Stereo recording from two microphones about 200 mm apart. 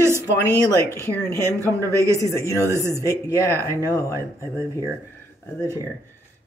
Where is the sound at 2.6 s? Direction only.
15° right (ahead or behind).